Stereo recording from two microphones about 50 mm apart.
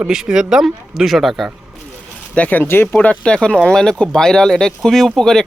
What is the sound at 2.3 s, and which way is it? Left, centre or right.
Speech, left.